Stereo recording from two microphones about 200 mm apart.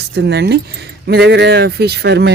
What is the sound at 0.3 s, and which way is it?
Speech, 55° right (ahead or behind).